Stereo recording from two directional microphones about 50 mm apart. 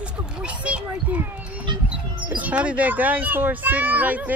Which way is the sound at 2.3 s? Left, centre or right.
Right.